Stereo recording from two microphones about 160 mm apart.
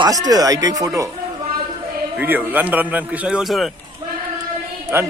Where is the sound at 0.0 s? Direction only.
25° right (ahead or behind).